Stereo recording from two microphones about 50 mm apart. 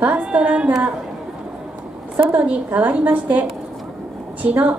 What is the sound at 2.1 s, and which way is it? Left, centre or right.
A woman's voice, right.